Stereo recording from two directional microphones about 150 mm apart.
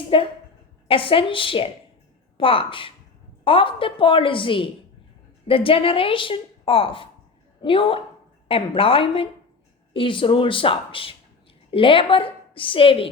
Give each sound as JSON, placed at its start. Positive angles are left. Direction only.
{"t": 0.1, "sound": "a woman's voice", "side_deg": 35}